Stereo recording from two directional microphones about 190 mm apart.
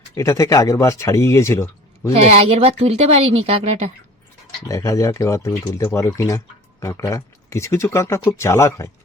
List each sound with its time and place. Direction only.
0.1 s speech: 15° left (ahead or behind)
2.2 s speech: 30° right (ahead or behind)
4.7 s speech: 15° left (ahead or behind)